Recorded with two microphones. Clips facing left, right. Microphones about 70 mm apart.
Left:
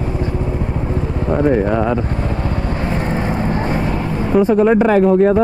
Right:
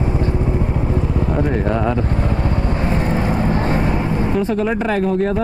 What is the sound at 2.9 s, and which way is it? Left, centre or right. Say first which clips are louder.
Vehicle: even; centre.